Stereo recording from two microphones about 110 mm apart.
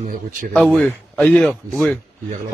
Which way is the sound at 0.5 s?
Centre (ahead or behind).